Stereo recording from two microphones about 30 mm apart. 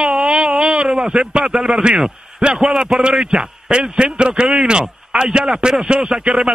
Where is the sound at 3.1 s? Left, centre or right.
Right.